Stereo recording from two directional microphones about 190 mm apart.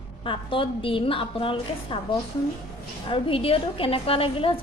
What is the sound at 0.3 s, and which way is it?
A woman's voice, 30° left (ahead or behind).